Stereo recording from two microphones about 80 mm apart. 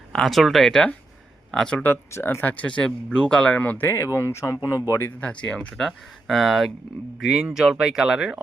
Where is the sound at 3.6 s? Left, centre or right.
Left.